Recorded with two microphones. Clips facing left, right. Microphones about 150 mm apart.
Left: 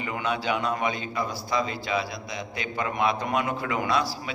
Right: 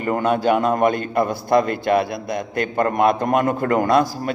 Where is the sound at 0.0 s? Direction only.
50° right (ahead or behind).